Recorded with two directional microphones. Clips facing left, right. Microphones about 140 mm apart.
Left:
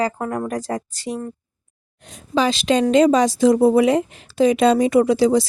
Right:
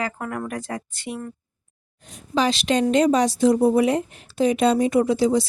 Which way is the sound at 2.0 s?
75° left (ahead or behind).